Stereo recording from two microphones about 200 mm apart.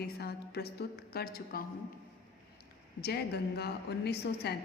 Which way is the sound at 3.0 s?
55° left (ahead or behind).